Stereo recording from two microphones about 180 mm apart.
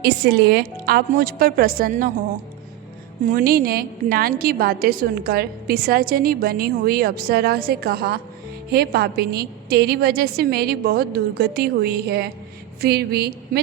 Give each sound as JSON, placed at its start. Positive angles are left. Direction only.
{"t": 0.0, "sound": "a woman's voice", "side_deg": -60}